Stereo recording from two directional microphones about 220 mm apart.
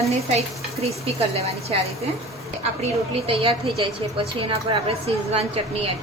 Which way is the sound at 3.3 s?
25° right (ahead or behind).